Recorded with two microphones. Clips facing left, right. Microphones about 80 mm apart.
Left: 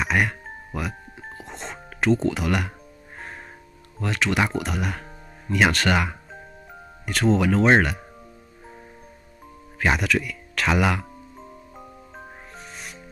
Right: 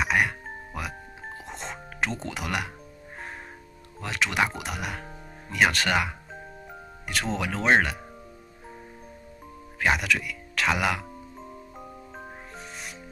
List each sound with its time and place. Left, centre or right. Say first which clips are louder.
0.0 s music: left 1 dB; centre
4.0 s speech: left 3 dB; centre
9.8 s speech: left 2 dB; centre
11.8 s music: even; centre